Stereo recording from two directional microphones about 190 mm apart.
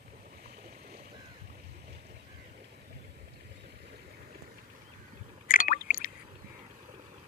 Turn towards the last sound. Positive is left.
turn(degrees=45)  # may be behind; listen again after turning